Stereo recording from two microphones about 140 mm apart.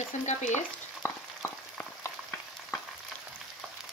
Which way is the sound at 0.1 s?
55° left (ahead or behind).